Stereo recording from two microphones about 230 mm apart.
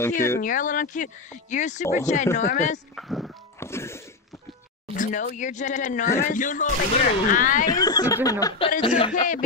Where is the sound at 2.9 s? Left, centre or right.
Centre.